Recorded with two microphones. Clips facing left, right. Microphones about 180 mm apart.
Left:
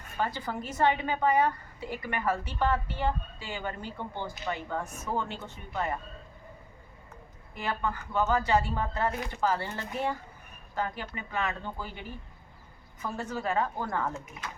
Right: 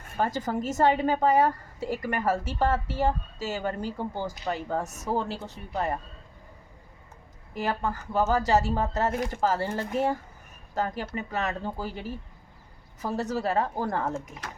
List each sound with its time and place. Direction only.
0.2 s a woman's voice: 45° right (ahead or behind)
7.5 s speech: 40° right (ahead or behind)